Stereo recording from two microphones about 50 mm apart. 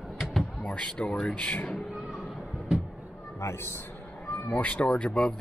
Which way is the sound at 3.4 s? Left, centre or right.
Left.